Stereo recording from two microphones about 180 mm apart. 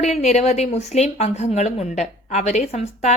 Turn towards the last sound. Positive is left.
turn(degrees=40)  # may be behind; listen again after turning